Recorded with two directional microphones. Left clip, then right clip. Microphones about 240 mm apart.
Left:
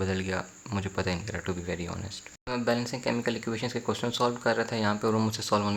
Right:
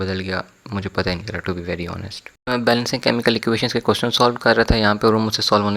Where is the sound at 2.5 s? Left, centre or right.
Right.